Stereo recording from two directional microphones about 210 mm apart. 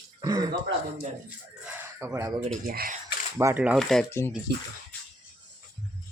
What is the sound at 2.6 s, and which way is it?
Speech, 45° right (ahead or behind).